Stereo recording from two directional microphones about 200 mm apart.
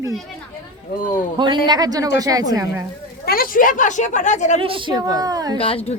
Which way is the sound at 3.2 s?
50° left (ahead or behind).